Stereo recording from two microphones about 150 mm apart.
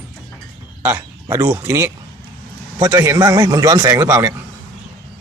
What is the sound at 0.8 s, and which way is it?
A man's voice, 15° right (ahead or behind).